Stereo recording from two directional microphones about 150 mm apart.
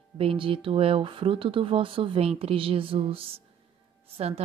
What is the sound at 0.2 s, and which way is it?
A woman's voice, 35° right (ahead or behind).